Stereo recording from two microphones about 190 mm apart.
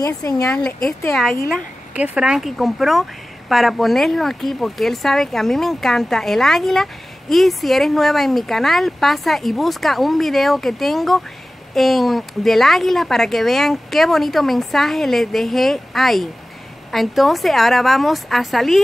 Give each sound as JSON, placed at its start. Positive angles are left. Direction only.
{"t": 0.0, "sound": "speech", "side_deg": 20}
{"t": 0.8, "sound": "a woman's voice", "side_deg": 0}